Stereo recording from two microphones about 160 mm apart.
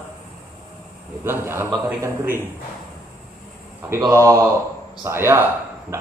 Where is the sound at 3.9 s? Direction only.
15° right (ahead or behind).